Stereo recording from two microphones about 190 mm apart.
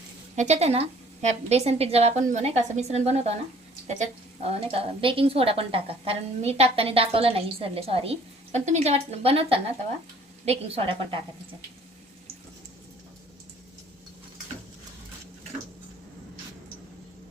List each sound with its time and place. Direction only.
0.3 s a woman's voice: 35° right (ahead or behind)